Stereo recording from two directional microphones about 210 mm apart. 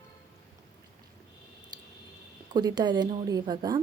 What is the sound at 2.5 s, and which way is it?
Speech, 20° right (ahead or behind).